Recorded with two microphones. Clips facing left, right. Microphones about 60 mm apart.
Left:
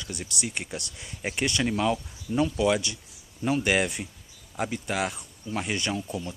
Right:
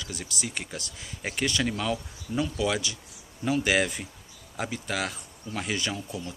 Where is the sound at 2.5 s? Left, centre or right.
Centre.